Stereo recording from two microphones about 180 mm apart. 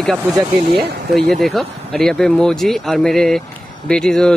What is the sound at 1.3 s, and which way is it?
Speech, centre (ahead or behind).